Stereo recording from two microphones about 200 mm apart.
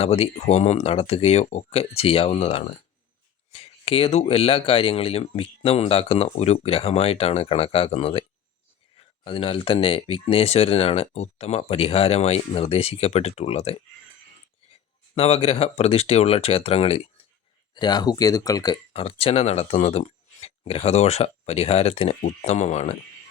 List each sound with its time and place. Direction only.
0.0 s speech: 30° left (ahead or behind)
15.1 s speech: 30° left (ahead or behind)